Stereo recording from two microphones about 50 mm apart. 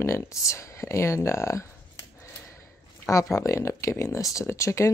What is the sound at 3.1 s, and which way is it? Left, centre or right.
Speech, left.